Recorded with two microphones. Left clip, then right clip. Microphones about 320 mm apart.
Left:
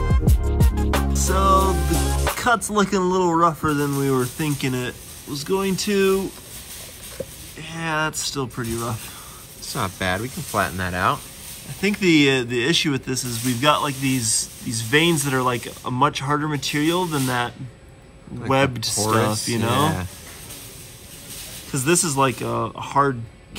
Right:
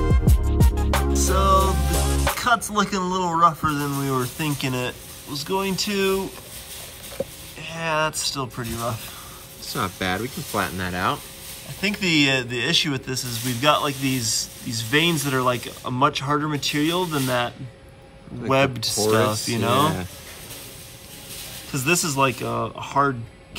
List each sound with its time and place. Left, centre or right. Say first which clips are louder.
0.1 s music: even; centre
7.6 s speech: right 1 dB; centre
9.7 s speech: left 1 dB; centre
11.8 s speech: left 3 dB; centre
21.7 s speech: left 1 dB; centre